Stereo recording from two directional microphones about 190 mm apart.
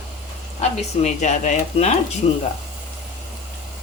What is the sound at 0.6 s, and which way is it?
Speech, 40° left (ahead or behind).